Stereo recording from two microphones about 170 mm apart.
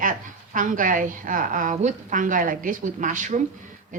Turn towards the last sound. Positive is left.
turn(degrees=-45)  # may be behind; listen again after turning